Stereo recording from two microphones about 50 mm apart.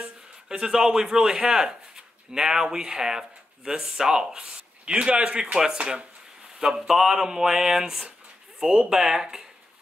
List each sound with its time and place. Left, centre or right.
0.0 s speech: centre
8.6 s speech: centre